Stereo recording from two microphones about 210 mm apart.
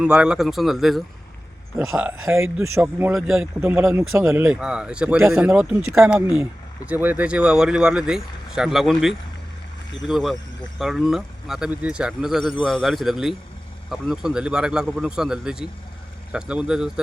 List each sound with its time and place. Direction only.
0.0 s speech: 5° right (ahead or behind)